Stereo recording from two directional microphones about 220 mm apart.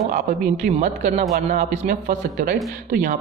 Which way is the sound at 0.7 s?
30° right (ahead or behind).